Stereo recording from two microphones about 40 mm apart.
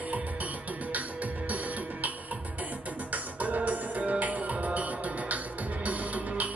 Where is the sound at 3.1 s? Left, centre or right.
Right.